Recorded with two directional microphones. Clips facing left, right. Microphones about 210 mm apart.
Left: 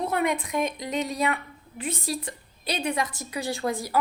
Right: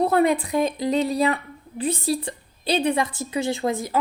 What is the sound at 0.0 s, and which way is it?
Speech, 35° right (ahead or behind).